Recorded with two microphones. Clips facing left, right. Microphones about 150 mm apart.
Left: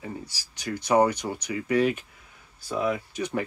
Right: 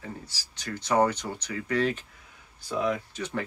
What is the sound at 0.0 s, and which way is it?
Speech, 15° left (ahead or behind).